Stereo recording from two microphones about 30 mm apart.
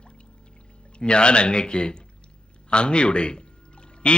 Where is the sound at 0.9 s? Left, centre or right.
Left.